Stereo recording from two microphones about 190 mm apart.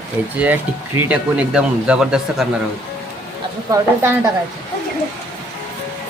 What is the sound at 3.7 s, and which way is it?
Speech, 15° right (ahead or behind).